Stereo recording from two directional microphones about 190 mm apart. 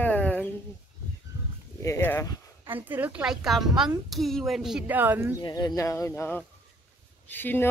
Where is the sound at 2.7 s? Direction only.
10° right (ahead or behind).